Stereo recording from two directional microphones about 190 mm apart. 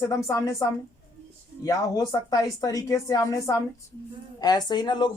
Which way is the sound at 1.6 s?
20° left (ahead or behind).